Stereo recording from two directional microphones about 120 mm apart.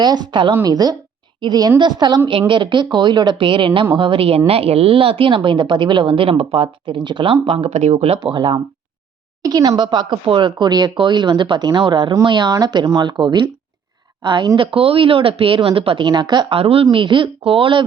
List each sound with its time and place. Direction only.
0.0 s speech: 35° right (ahead or behind)
7.4 s speech: 55° right (ahead or behind)
8.2 s speech: 40° right (ahead or behind)
16.6 s speech: 50° right (ahead or behind)